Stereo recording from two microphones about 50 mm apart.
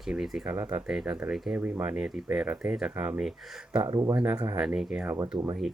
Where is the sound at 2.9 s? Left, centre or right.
Right.